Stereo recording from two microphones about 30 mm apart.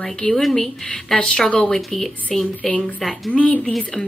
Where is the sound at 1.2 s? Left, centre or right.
Left.